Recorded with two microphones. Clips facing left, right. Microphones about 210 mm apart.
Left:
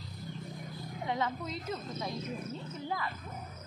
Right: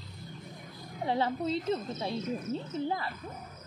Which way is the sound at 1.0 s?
30° right (ahead or behind).